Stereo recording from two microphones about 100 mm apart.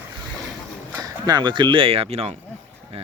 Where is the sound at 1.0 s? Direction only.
45° right (ahead or behind); by 2.3 s 90° right.